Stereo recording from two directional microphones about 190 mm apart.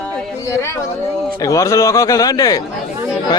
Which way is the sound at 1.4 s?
15° left (ahead or behind).